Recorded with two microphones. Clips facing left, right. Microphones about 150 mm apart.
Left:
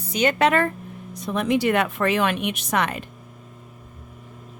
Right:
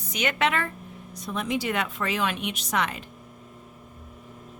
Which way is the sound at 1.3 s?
60° left (ahead or behind).